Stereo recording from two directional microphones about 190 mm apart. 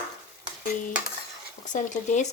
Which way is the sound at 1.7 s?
40° left (ahead or behind).